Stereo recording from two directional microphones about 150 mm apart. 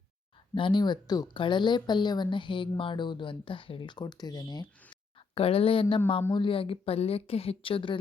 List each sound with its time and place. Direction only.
0.5 s speech: 35° left (ahead or behind)